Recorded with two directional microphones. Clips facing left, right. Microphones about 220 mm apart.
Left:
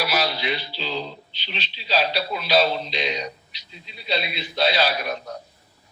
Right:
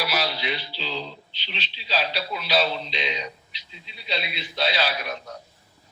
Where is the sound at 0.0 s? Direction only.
45° left (ahead or behind).